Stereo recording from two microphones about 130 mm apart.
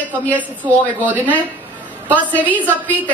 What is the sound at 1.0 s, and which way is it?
Speech, 15° right (ahead or behind).